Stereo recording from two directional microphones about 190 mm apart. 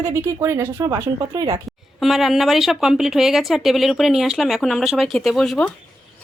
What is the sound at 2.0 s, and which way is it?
A woman's voice, centre (ahead or behind).